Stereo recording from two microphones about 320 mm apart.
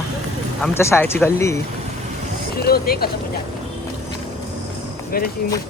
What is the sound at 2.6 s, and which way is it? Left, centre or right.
Speech, left.